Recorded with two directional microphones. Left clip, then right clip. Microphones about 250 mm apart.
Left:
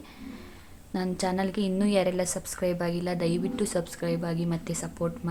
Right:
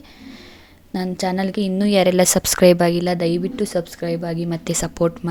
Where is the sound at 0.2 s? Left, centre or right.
Right.